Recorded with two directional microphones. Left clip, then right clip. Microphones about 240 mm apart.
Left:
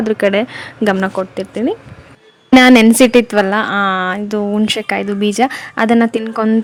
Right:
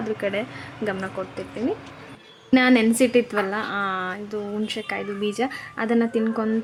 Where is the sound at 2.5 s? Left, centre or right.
Left.